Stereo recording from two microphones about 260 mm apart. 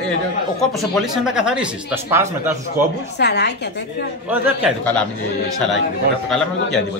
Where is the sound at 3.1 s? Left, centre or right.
Left.